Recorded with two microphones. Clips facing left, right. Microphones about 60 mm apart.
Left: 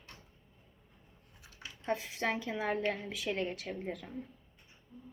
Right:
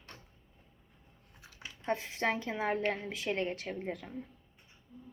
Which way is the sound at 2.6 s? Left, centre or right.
Centre.